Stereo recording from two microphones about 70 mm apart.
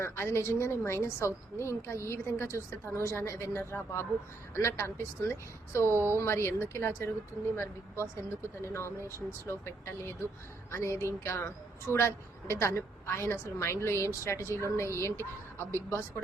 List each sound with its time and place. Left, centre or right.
0.0 s a woman's voice: left
5.9 s speech: right
6.1 s a woman's voice: left